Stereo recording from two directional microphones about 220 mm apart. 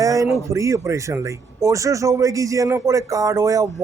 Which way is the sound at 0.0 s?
15° right (ahead or behind).